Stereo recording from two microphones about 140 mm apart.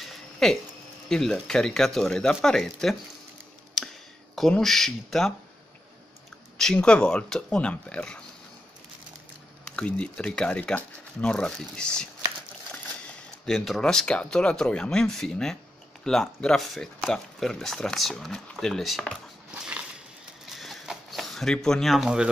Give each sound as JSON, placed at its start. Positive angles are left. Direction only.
{"t": 0.0, "sound": "a sound", "side_deg": 0}
{"t": 1.0, "sound": "speech", "side_deg": 5}
{"t": 3.8, "sound": "clicking", "side_deg": 0}
{"t": 4.4, "sound": "speech", "side_deg": 0}
{"t": 6.6, "sound": "speech", "side_deg": 5}
{"t": 9.7, "sound": "speech", "side_deg": 5}
{"t": 13.5, "sound": "speech", "side_deg": 5}
{"t": 20.4, "sound": "zipper", "side_deg": 0}